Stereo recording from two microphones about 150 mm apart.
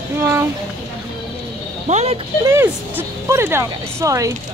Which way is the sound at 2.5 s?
20° right (ahead or behind).